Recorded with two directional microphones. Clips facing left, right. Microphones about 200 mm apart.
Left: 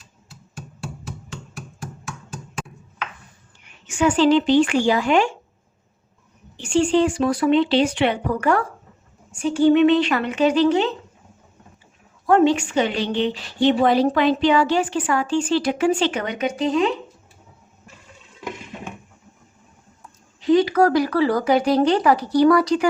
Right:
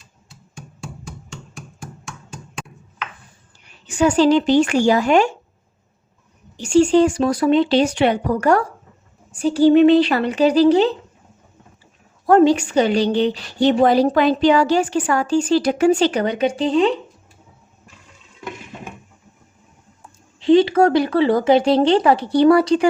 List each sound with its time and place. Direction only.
3.6 s a woman's voice: 35° right (ahead or behind)
6.6 s a woman's voice: 40° right (ahead or behind)
12.2 s a woman's voice: 35° right (ahead or behind)
20.4 s speech: 25° right (ahead or behind)